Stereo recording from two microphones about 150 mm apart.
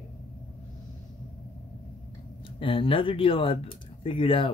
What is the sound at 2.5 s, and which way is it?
Speech, 35° left (ahead or behind).